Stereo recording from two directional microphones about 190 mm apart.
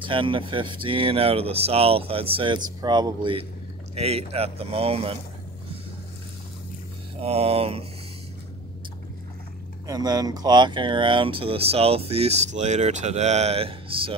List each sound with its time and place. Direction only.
0.0 s speech: 25° right (ahead or behind)
7.2 s speech: 30° right (ahead or behind)
9.8 s speech: 20° right (ahead or behind)